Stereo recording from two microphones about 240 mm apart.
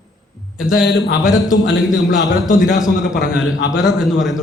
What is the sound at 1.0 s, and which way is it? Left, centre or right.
Speech, left.